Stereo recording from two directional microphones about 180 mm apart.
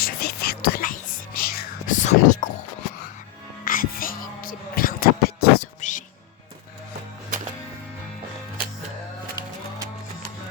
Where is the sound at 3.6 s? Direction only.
50° left (ahead or behind).